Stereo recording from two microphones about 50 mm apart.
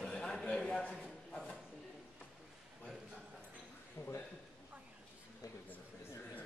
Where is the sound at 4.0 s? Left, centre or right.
Left.